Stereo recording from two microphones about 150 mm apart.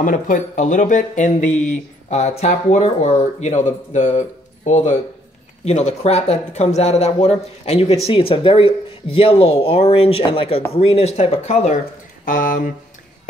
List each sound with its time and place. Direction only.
0.0 s speech: 60° left (ahead or behind)
12.3 s speech: 65° left (ahead or behind)